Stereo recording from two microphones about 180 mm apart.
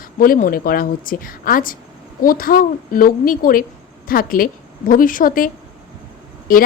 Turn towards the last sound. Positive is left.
turn(degrees=50)  # may be behind; listen again after turning